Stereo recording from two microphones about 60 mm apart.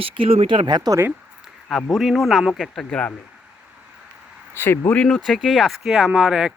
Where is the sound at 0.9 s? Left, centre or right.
Right.